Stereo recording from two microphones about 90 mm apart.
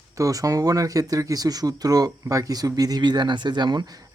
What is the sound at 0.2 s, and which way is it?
Speech, 40° right (ahead or behind).